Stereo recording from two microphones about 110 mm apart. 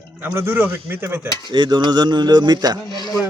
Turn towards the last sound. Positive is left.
turn(degrees=40)  # may be behind; listen again after turning